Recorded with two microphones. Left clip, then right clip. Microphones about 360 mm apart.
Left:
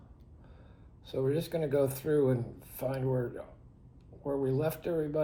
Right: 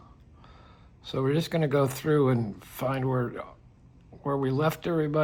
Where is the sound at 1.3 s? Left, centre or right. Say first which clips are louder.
Right 5 dB; right.